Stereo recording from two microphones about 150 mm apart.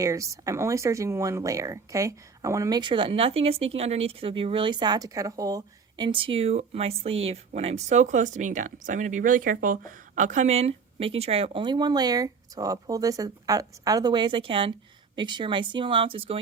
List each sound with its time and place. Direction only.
0.0 s speech: 20° right (ahead or behind); by 9.7 s 70° right (ahead or behind)
10.2 s speech: 55° right (ahead or behind); by 16.4 s 35° right (ahead or behind)